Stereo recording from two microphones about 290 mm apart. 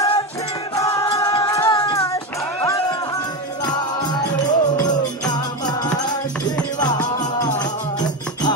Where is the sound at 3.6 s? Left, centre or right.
Centre.